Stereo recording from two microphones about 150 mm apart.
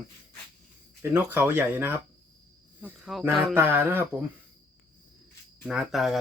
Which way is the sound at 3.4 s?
15° right (ahead or behind).